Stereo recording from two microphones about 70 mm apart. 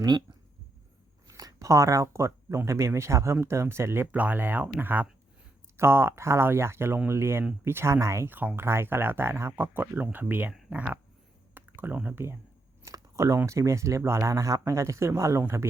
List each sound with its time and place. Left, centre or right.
0.0 s speech: right
1.4 s speech: right
4.1 s speech: right
5.7 s speech: right
8.3 s speech: right
11.5 s a sound: right
12.8 s speech: right